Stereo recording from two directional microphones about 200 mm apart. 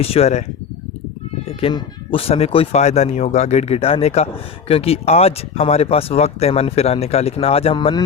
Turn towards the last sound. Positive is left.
turn(degrees=25)  # may be behind; listen again after turning